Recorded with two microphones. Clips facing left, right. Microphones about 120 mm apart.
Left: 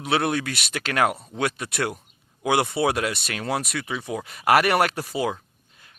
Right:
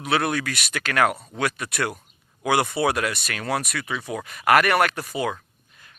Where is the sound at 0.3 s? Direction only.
25° left (ahead or behind).